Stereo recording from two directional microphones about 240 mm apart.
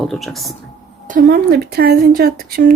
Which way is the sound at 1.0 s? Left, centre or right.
Right.